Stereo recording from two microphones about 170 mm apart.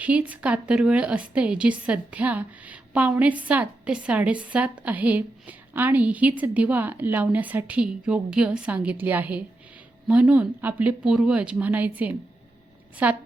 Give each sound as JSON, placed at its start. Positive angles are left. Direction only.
{"t": 0.0, "sound": "a woman's voice", "side_deg": -10}